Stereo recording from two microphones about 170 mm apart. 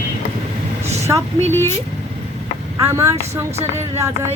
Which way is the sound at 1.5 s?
15° left (ahead or behind).